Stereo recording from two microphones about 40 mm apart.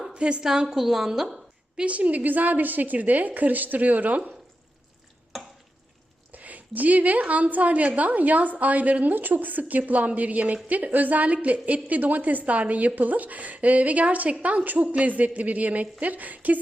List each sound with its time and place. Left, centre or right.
0.1 s a woman's voice: right; by 1.4 s centre
1.7 s a woman's voice: right
6.3 s a woman's voice: right